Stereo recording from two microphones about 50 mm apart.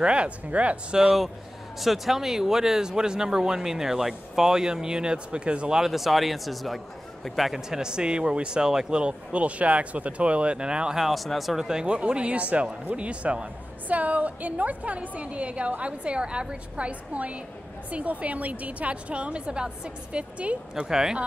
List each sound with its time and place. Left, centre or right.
0.0 s a woman's voice: right
0.9 s speech: centre
1.8 s speech: centre; by 5.8 s right
5.8 s a woman's voice: centre
11.0 s speech: centre
11.8 s a woman's voice: right
20.8 s speech: centre